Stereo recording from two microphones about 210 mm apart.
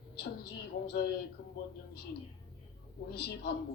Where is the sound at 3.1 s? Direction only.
50° left (ahead or behind).